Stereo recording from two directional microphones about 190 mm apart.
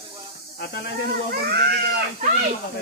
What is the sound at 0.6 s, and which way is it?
Speech, 60° left (ahead or behind).